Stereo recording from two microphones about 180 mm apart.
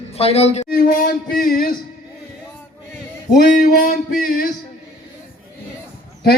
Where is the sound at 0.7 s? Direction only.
55° left (ahead or behind).